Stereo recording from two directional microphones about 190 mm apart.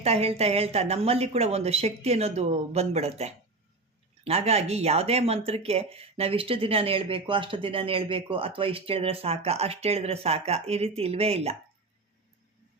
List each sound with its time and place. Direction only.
0.0 s speech: 30° right (ahead or behind)